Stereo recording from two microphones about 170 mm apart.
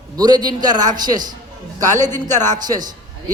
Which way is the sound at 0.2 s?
25° right (ahead or behind).